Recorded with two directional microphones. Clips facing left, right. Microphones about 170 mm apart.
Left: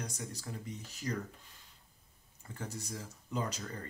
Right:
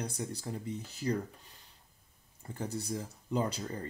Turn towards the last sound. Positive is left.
turn(degrees=-30)  # may be behind; listen again after turning